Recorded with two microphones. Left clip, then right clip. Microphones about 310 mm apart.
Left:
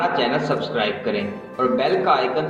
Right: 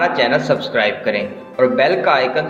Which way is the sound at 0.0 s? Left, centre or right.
Right.